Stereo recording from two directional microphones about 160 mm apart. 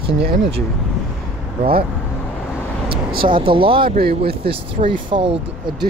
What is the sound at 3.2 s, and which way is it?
Speech, 30° right (ahead or behind).